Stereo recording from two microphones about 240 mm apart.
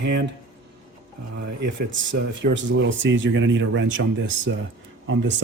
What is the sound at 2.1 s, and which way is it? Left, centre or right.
A man's voice, right.